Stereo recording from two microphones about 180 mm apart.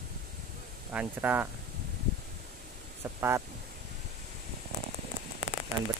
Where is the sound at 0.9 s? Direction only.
10° right (ahead or behind).